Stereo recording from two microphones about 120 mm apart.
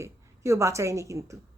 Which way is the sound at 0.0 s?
25° right (ahead or behind).